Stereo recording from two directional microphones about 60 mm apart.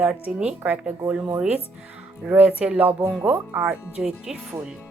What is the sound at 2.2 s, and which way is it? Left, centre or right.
Speech, right.